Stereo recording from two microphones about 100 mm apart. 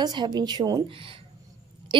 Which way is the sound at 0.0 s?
45° right (ahead or behind).